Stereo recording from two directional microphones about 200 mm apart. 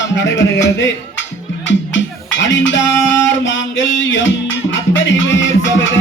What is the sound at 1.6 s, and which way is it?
Music, 65° left (ahead or behind).